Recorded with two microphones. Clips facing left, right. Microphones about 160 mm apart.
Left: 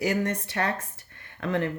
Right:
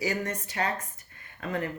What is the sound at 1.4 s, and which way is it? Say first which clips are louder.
Speech: left 4 dB; 70° left (ahead or behind).